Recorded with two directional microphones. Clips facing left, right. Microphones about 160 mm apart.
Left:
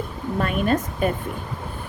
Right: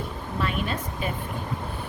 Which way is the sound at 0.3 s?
50° left (ahead or behind).